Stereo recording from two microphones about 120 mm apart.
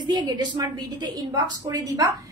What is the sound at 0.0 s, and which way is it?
A woman's voice, 35° right (ahead or behind).